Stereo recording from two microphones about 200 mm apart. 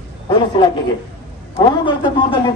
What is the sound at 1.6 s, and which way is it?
Speech, 20° left (ahead or behind).